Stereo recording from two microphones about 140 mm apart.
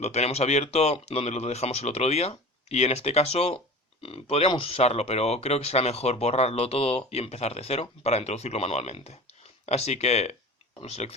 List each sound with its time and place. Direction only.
0.0 s speech: 50° left (ahead or behind)